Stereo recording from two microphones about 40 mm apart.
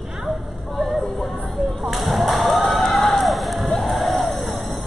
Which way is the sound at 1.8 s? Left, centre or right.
Centre.